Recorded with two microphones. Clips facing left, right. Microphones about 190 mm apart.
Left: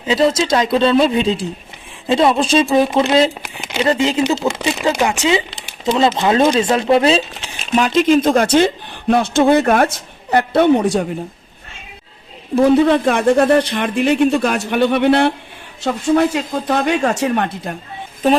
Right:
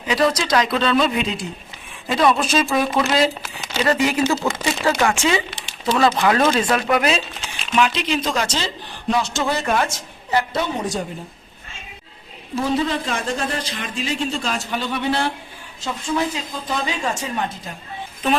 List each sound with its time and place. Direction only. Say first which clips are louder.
0.0 s speech: left 4 dB; 25° left (ahead or behind); by 11.0 s 65° left (ahead or behind)
12.5 s speech: left 10 dB; 60° left (ahead or behind)